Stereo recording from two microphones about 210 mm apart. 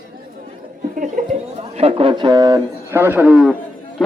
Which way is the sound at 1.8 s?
25° right (ahead or behind).